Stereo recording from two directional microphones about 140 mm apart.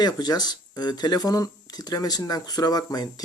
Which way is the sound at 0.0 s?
30° left (ahead or behind).